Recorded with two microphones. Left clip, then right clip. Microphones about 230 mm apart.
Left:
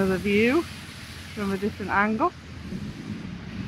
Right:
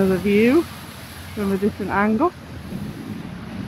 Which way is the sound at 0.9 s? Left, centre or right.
Right.